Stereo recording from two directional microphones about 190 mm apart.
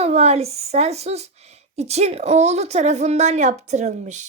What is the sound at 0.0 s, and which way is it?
A woman's voice, 35° right (ahead or behind).